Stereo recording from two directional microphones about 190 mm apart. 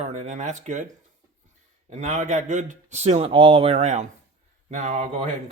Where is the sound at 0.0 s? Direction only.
35° right (ahead or behind).